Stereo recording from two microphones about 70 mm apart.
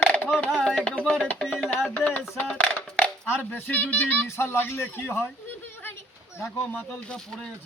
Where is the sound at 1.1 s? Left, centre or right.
Centre.